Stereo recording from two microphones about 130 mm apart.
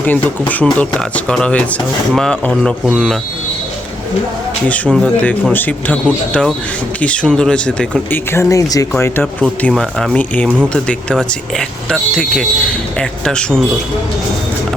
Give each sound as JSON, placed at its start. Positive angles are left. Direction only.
{"t": 0.0, "sound": "speech", "side_deg": 10}
{"t": 4.7, "sound": "speech", "side_deg": 5}
{"t": 8.3, "sound": "speech", "side_deg": 20}